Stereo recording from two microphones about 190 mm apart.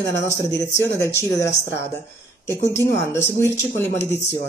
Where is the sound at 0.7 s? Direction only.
15° left (ahead or behind).